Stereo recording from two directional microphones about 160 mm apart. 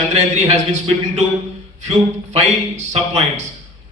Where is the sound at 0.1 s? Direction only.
45° right (ahead or behind).